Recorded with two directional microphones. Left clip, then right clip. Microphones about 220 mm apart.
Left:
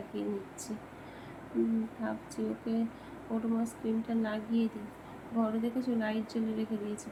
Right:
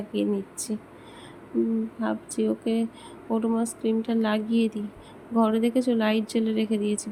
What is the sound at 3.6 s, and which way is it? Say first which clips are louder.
Speech: right 8 dB; 35° right (ahead or behind).